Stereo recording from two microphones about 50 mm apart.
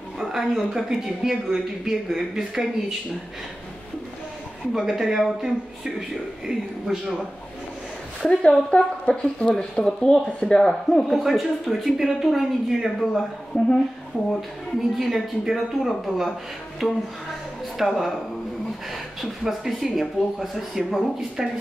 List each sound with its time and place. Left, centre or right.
0.2 s a woman's voice: centre
4.7 s a woman's voice: centre
8.2 s speech: centre
13.5 s a woman's voice: centre
14.8 s speech: centre
17.7 s speech: centre
19.4 s speech: centre